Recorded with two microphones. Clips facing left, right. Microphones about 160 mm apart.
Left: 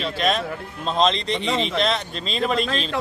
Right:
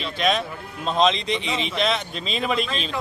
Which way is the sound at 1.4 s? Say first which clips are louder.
Left 4 dB; 35° left (ahead or behind).